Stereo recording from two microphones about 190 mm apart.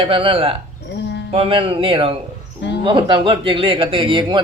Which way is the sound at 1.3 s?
30° right (ahead or behind).